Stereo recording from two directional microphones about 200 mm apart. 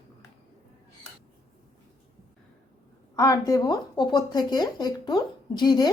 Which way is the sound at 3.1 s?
15° left (ahead or behind).